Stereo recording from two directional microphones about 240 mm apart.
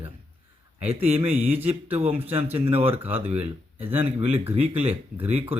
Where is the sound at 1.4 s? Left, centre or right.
Centre.